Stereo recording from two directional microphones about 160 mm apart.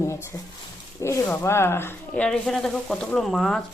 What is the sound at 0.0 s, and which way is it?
Speech, 15° left (ahead or behind).